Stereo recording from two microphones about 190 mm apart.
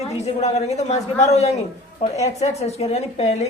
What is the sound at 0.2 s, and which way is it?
A woman's voice, 35° left (ahead or behind).